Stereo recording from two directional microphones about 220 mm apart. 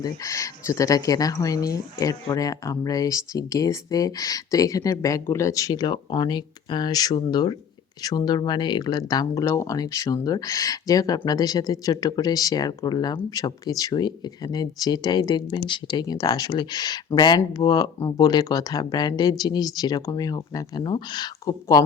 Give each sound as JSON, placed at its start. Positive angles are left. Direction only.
{"t": 0.0, "sound": "speech", "side_deg": 15}